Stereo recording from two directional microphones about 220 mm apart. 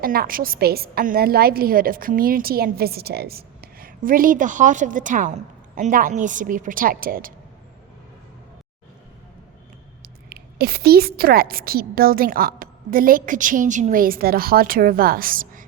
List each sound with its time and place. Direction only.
0.0 s a woman's voice: 40° right (ahead or behind)
10.0 s a woman's voice: 45° right (ahead or behind)